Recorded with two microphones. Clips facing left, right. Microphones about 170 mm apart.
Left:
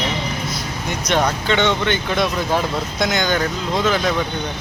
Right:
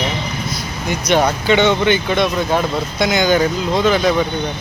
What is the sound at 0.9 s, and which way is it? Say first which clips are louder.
Speech: right 4 dB; 5° right (ahead or behind).